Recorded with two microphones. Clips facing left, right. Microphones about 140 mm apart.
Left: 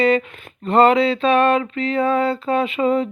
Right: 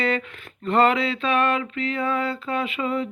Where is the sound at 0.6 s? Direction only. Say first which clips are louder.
Left 6 dB; 25° left (ahead or behind).